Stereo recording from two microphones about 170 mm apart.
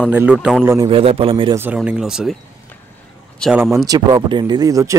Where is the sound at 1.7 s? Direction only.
5° right (ahead or behind).